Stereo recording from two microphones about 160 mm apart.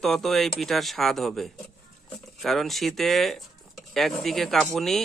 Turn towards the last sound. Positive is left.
turn(degrees=0)  # may be behind; listen again after turning